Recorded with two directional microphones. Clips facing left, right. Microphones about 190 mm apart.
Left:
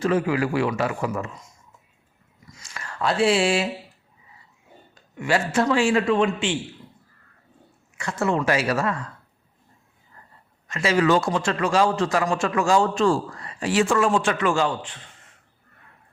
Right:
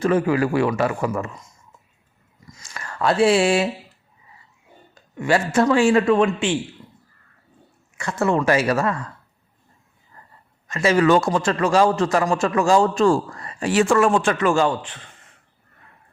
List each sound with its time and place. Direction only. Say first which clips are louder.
0.0 s a man's voice: right 3 dB; 50° right (ahead or behind)
2.7 s speech: right 4 dB; 50° right (ahead or behind)
5.1 s a man's voice: right 3 dB; 45° right (ahead or behind)
7.9 s a man's voice: right 3 dB; 50° right (ahead or behind)
10.7 s a man's voice: right 3 dB; 45° right (ahead or behind)